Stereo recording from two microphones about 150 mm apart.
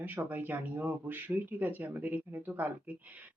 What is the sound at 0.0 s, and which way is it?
Speech, 10° right (ahead or behind).